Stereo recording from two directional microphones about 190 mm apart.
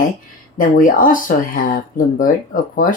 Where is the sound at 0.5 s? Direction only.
45° left (ahead or behind).